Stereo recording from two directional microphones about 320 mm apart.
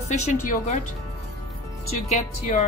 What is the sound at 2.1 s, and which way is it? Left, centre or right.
Speech, left.